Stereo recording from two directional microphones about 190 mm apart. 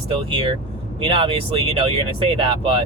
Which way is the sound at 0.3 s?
25° right (ahead or behind).